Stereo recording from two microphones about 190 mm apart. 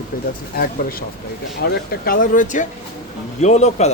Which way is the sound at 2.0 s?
45° left (ahead or behind).